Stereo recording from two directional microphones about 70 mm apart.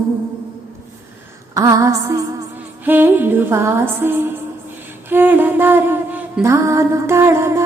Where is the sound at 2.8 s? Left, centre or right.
Right.